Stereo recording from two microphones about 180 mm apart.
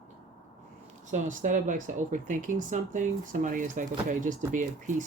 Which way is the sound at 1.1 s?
45° right (ahead or behind).